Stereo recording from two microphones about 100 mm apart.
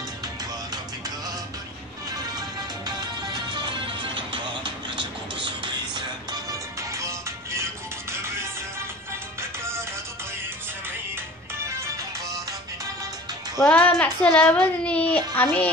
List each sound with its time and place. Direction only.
2.9 s music: 45° right (ahead or behind)
6.5 s music: 30° right (ahead or behind)
11.6 s music: 30° right (ahead or behind)
13.7 s child singing: 15° left (ahead or behind)